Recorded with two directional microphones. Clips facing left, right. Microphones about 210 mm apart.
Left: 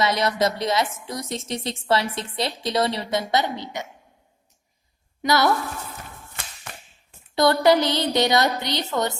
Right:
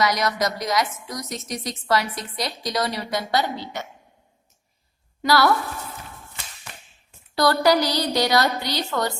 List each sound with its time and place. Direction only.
0.0 s a woman's voice: 25° left (ahead or behind)
5.2 s a woman's voice: 20° left (ahead or behind)
7.3 s a woman's voice: 20° left (ahead or behind)